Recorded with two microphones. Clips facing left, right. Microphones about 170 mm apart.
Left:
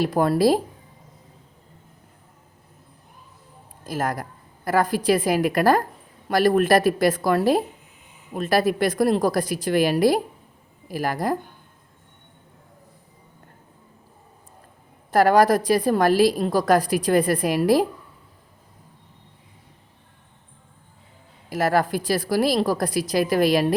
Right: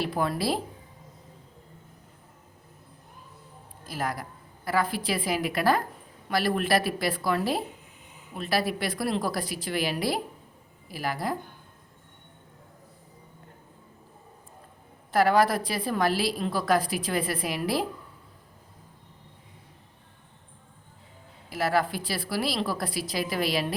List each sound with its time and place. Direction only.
0.0 s a woman's voice: 45° left (ahead or behind)
3.8 s a woman's voice: 45° left (ahead or behind)
15.1 s a woman's voice: 45° left (ahead or behind)
21.5 s a woman's voice: 50° left (ahead or behind)